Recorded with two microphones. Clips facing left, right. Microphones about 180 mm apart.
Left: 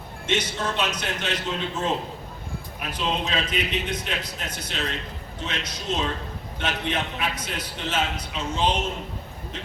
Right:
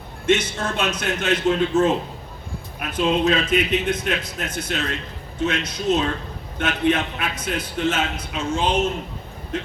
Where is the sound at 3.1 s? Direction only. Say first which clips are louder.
Right 8 dB; 50° right (ahead or behind).